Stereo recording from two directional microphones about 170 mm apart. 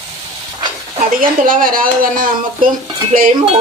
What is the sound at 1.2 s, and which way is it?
A woman's voice, 55° right (ahead or behind).